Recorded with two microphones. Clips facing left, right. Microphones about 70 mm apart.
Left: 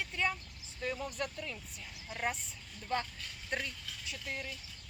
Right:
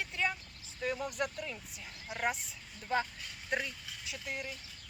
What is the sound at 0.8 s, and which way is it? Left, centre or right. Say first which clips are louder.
Speech: right 2 dB; centre.